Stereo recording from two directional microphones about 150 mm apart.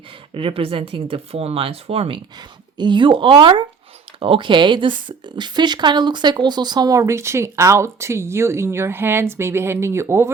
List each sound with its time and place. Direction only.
0.3 s speech: 40° right (ahead or behind); by 10.3 s 15° right (ahead or behind)